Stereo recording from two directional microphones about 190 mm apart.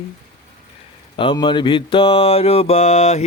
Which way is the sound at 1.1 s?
25° left (ahead or behind).